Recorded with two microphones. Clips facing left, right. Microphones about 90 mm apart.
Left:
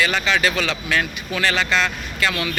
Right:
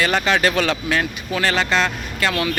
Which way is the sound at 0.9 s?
30° right (ahead or behind).